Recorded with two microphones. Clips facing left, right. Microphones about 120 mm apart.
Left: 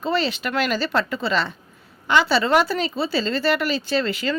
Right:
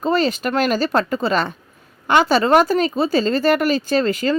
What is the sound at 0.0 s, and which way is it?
Speech, 45° right (ahead or behind).